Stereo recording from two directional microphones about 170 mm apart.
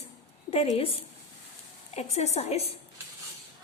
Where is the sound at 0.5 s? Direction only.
35° left (ahead or behind).